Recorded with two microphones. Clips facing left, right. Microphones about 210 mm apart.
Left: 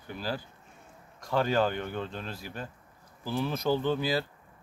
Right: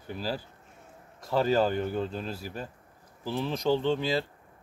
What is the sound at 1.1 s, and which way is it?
Speech, 5° right (ahead or behind).